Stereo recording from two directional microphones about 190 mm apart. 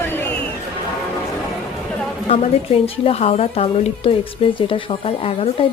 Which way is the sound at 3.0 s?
30° left (ahead or behind).